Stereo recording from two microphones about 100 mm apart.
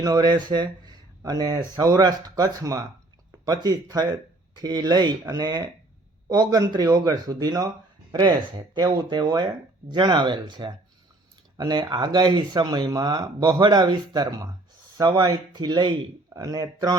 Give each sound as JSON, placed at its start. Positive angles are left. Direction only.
{"t": 0.0, "sound": "speech", "side_deg": -45}
{"t": 16.3, "sound": "speech", "side_deg": -35}